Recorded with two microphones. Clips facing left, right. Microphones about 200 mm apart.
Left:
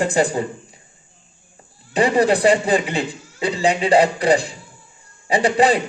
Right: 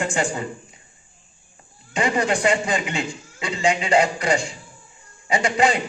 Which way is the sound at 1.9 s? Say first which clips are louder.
Left 6 dB; 35° left (ahead or behind).